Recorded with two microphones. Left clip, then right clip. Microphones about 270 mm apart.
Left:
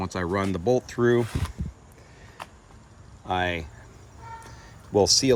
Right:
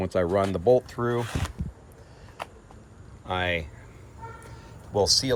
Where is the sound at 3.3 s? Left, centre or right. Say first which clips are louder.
Left 1 dB; centre.